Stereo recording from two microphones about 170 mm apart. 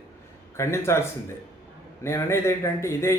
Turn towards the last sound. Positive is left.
turn(degrees=15)  # may be behind; listen again after turning